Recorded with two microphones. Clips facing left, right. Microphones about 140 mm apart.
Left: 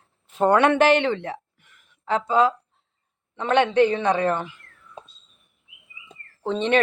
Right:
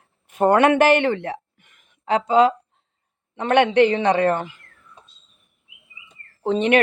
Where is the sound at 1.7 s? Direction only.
20° right (ahead or behind).